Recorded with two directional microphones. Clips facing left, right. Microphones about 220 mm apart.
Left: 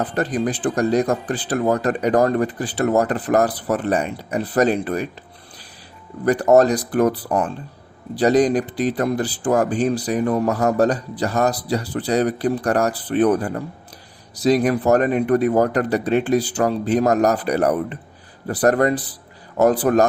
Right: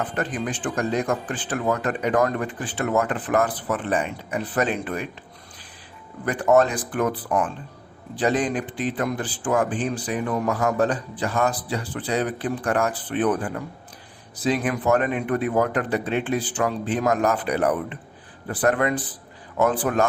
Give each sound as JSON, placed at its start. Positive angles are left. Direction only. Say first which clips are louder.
{"t": 0.0, "sound": "a man's voice", "louder": "left 6 dB", "side_deg": 35}
{"t": 6.2, "sound": "a man's voice", "louder": "left 5 dB", "side_deg": 40}